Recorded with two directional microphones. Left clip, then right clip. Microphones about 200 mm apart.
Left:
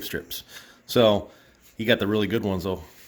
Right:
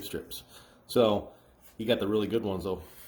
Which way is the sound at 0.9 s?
45° left (ahead or behind).